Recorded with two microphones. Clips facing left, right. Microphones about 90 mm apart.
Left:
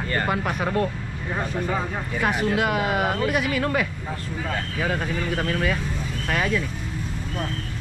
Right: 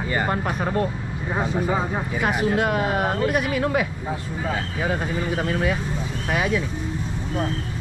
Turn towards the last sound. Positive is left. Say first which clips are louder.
# right 1 dB
turn(degrees=-10)  # may be behind; listen again after turning